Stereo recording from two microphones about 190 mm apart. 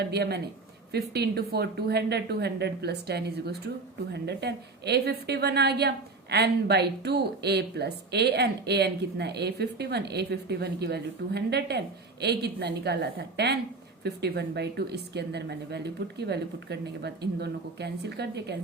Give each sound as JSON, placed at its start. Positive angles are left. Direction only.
{"t": 0.0, "sound": "speech", "side_deg": -60}